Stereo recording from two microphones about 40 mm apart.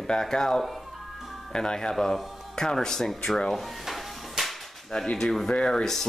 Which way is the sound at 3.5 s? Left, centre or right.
Centre.